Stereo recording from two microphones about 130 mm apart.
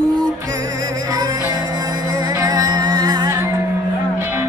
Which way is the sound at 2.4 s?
30° right (ahead or behind).